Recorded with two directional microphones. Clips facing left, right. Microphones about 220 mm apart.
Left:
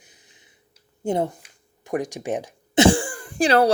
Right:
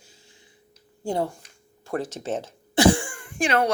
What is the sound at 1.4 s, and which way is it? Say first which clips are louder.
Cough: even; 15° left (ahead or behind).